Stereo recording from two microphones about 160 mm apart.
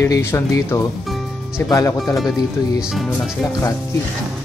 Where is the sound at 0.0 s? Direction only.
15° left (ahead or behind).